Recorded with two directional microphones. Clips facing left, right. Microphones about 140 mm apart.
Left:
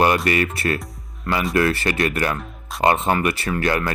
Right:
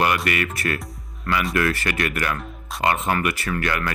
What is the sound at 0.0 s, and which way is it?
Speech, 30° left (ahead or behind).